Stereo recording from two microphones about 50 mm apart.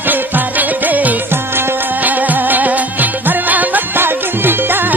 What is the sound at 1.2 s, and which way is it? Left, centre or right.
Music, right.